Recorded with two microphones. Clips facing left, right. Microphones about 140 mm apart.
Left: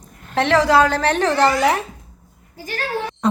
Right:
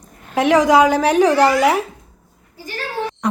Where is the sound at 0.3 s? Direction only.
10° right (ahead or behind).